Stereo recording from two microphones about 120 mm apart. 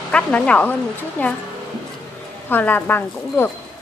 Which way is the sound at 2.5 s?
15° left (ahead or behind).